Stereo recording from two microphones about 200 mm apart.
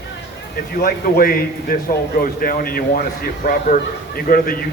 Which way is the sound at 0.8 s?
45° left (ahead or behind).